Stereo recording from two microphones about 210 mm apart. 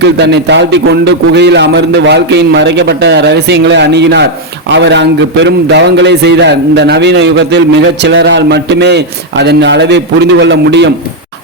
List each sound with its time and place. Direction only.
0.0 s a man's voice: 55° right (ahead or behind)